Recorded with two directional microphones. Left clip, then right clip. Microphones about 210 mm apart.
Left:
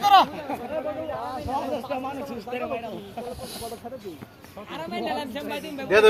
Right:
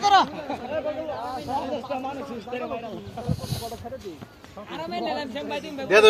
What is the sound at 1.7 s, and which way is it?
Speech, 35° left (ahead or behind).